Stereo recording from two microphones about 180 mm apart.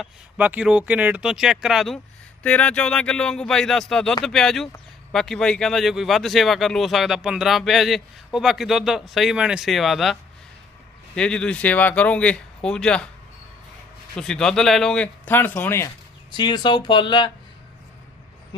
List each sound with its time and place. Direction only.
0.0 s speech: 10° right (ahead or behind)
14.2 s speech: 5° left (ahead or behind)
16.3 s speech: 25° left (ahead or behind)